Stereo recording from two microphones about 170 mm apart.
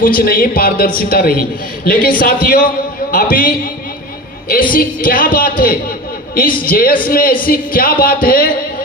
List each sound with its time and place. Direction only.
0.0 s a woman's voice: 60° left (ahead or behind)
4.7 s a woman's voice: 55° left (ahead or behind)